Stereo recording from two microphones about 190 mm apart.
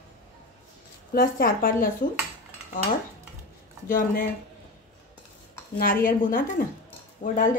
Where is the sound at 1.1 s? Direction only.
50° left (ahead or behind).